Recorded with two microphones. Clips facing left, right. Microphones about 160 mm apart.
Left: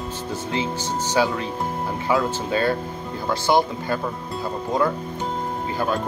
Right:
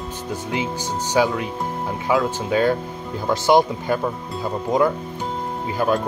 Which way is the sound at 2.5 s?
15° right (ahead or behind).